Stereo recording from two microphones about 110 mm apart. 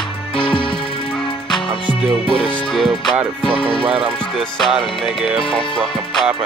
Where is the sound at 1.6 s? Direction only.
45° left (ahead or behind).